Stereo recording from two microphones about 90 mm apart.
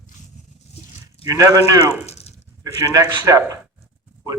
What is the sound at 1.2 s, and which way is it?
A man's voice, 40° right (ahead or behind).